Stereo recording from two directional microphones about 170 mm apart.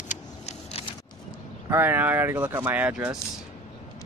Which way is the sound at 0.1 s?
40° left (ahead or behind).